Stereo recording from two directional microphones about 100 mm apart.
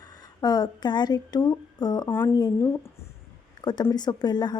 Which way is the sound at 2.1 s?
25° left (ahead or behind).